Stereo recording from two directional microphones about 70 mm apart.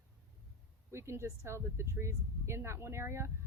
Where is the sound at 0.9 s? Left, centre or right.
Right.